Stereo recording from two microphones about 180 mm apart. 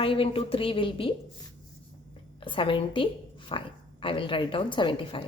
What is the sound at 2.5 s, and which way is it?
A woman's voice, 30° left (ahead or behind).